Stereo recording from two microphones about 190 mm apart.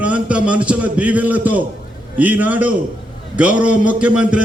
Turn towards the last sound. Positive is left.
turn(degrees=-5)  # may be behind; listen again after turning